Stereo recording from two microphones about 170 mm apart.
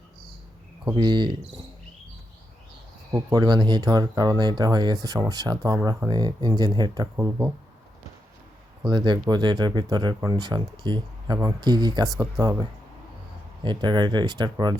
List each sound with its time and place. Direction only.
0.9 s speech: 25° right (ahead or behind)
3.1 s speech: 20° right (ahead or behind)
8.9 s speech: 25° right (ahead or behind)
13.7 s speech: 25° right (ahead or behind)